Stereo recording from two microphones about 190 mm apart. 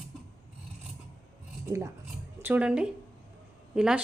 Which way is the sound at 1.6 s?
15° right (ahead or behind).